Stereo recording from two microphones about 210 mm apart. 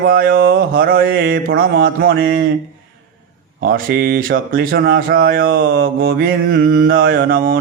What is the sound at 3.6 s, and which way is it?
Speech, 45° right (ahead or behind).